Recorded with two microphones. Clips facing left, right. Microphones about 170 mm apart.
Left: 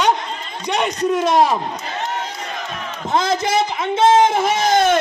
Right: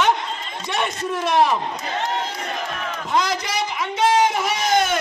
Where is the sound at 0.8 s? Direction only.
20° left (ahead or behind).